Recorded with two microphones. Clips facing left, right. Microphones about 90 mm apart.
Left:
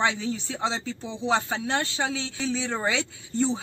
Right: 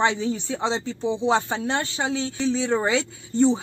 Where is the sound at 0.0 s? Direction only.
35° right (ahead or behind).